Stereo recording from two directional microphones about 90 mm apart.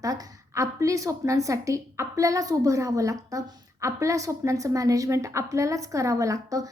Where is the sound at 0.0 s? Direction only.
35° right (ahead or behind).